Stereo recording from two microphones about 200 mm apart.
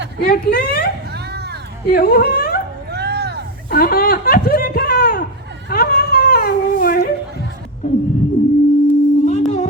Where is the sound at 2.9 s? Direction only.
55° right (ahead or behind).